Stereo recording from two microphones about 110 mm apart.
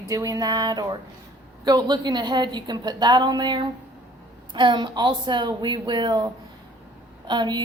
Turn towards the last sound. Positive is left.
turn(degrees=-40)  # may be behind; listen again after turning